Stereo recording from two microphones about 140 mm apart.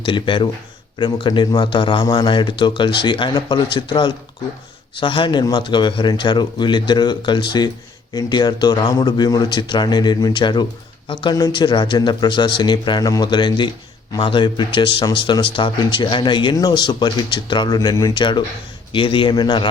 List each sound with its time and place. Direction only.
0.0 s speech: 35° left (ahead or behind)